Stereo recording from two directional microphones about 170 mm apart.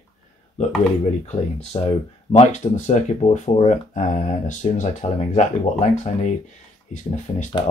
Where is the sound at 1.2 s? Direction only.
40° left (ahead or behind).